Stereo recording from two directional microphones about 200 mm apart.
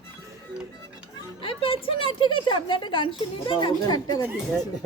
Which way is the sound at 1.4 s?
25° left (ahead or behind).